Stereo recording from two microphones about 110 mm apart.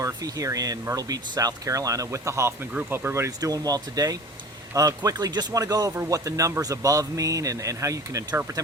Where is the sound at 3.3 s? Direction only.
35° right (ahead or behind).